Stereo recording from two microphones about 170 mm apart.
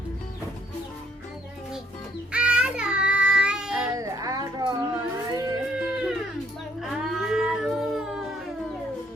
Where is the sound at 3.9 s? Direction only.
20° right (ahead or behind).